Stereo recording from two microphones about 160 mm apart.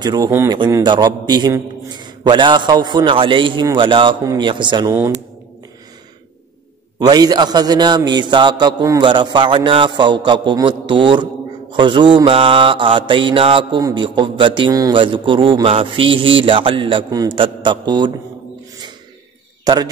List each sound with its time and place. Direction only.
0.0 s a man's voice: 25° right (ahead or behind)
4.9 s speech: 20° right (ahead or behind)
7.0 s a man's voice: 25° right (ahead or behind)
11.7 s mantra: 30° right (ahead or behind)
19.6 s a man's voice: 25° right (ahead or behind)